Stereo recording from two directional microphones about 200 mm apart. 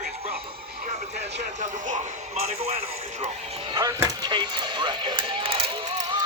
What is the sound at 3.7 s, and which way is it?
Speech, 20° right (ahead or behind).